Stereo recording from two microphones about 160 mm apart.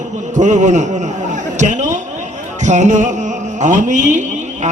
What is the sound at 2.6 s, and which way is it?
A man's voice, 50° right (ahead or behind).